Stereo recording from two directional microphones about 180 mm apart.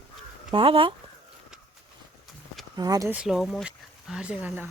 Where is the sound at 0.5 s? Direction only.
30° right (ahead or behind).